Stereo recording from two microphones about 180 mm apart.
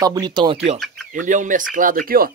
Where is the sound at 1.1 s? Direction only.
45° right (ahead or behind).